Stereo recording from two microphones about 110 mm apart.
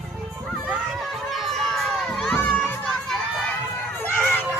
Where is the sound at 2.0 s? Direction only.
5° left (ahead or behind).